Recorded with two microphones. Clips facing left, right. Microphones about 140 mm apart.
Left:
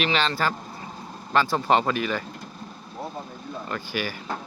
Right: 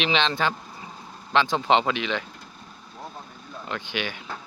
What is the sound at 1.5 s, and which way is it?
Speech, 5° right (ahead or behind).